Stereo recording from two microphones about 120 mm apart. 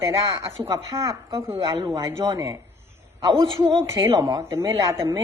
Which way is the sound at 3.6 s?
30° right (ahead or behind).